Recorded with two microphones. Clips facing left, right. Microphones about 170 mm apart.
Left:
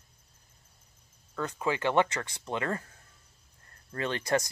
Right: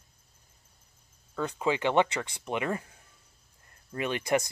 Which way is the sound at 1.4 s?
15° right (ahead or behind).